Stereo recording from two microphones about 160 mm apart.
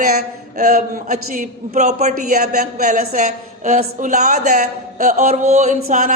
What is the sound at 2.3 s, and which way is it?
Speech, 70° right (ahead or behind).